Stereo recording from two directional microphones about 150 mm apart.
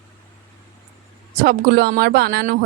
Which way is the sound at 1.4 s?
85° right.